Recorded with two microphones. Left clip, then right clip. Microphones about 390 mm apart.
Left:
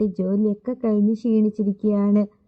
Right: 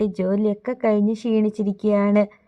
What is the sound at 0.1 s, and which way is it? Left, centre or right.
A woman's voice, centre.